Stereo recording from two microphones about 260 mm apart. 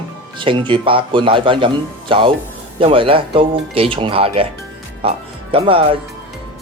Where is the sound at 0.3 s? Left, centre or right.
Centre.